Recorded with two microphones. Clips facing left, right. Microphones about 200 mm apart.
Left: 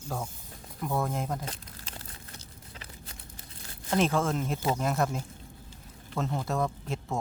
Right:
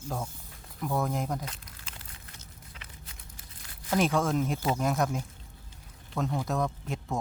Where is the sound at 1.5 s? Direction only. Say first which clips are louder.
Left 3 dB; 35° left (ahead or behind).